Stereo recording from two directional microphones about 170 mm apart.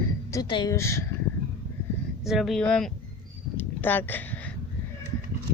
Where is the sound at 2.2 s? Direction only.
Centre (ahead or behind).